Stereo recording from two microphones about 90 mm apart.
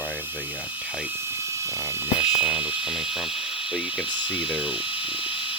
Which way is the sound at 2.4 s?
15° right (ahead or behind).